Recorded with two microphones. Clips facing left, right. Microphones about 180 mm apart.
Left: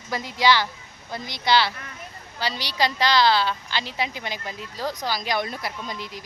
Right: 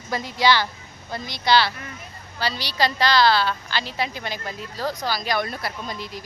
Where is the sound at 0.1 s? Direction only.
15° left (ahead or behind).